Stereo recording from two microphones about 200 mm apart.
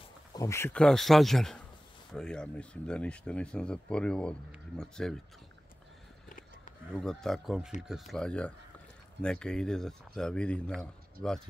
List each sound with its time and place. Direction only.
0.3 s speech: 15° left (ahead or behind)
6.2 s a sound: 45° left (ahead or behind)
6.9 s speech: 5° left (ahead or behind)